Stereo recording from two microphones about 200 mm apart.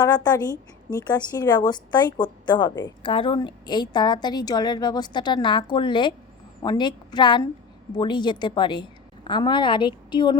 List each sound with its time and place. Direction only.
0.0 s a woman's voice: 20° left (ahead or behind)